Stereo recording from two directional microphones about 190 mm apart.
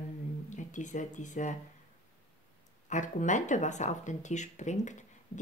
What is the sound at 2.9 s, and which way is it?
Speech, 40° left (ahead or behind).